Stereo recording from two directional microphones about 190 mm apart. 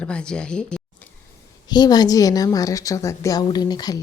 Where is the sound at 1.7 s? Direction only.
20° left (ahead or behind).